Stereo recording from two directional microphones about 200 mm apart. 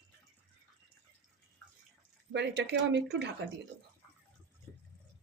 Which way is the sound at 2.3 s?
60° right (ahead or behind).